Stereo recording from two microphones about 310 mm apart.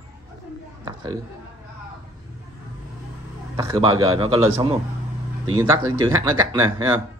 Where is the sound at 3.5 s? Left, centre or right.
Centre.